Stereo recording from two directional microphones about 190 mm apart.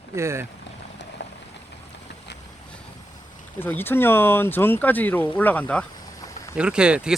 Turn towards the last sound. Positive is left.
turn(degrees=-5)  # may be behind; listen again after turning